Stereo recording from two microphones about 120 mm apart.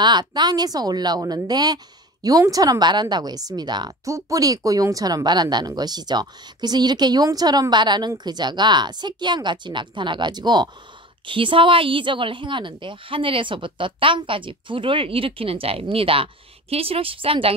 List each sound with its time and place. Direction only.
0.0 s a woman's voice: 35° right (ahead or behind)